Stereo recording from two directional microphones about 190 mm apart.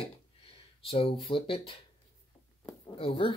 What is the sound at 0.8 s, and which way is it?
Speech, 30° left (ahead or behind).